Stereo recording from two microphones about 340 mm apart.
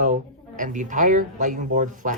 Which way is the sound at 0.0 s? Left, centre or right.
Right.